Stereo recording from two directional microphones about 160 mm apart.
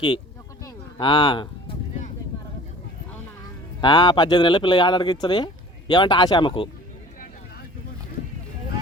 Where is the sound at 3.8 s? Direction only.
30° left (ahead or behind).